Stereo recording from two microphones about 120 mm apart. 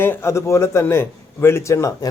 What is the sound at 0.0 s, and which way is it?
Speech, 20° left (ahead or behind).